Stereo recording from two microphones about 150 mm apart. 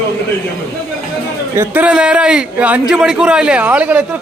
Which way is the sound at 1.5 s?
10° right (ahead or behind).